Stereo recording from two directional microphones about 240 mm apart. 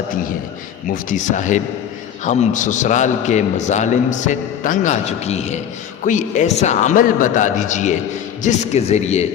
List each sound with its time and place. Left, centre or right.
1.1 s a man's voice: left